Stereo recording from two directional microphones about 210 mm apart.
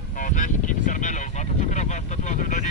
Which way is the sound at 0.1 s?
40° left (ahead or behind).